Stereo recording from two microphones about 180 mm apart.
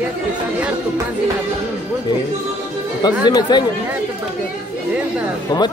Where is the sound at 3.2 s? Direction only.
25° left (ahead or behind).